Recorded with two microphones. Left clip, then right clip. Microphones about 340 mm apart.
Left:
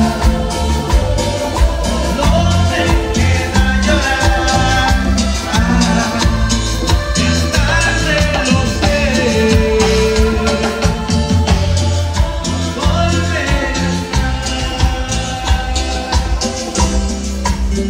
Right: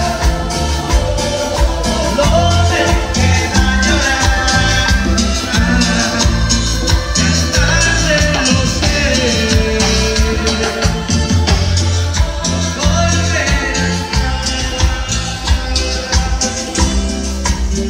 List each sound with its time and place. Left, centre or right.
3.8 s music: centre